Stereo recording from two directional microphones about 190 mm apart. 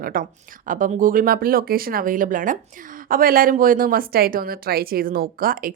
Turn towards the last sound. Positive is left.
turn(degrees=-50)  # may be behind; listen again after turning